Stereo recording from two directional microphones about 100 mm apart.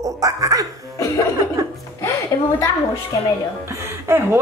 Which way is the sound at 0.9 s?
30° left (ahead or behind).